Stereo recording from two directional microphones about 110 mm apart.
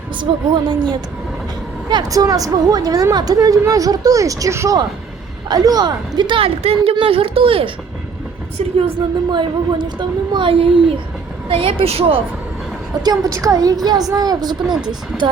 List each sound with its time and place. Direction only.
0.2 s a child's voice: 45° right (ahead or behind)
6.6 s speech: 65° right (ahead or behind)
6.9 s speech: 55° right (ahead or behind)
9.3 s a child's voice: 45° right (ahead or behind)
13.1 s a woman's voice: 30° right (ahead or behind)
15.1 s speech: centre (ahead or behind)